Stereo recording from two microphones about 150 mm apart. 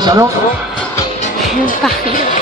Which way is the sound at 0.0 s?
25° right (ahead or behind).